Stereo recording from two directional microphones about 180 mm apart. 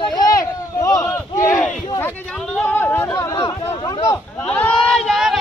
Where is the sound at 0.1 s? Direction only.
20° left (ahead or behind).